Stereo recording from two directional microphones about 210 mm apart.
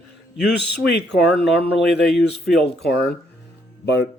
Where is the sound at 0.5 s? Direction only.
55° left (ahead or behind).